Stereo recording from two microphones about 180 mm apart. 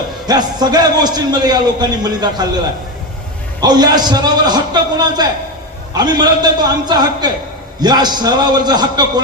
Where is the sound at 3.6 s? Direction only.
20° right (ahead or behind).